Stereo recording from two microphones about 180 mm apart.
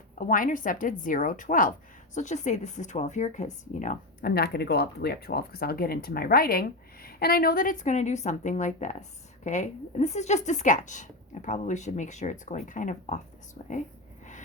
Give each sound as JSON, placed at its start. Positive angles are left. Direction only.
{"t": 0.2, "sound": "speech", "side_deg": 50}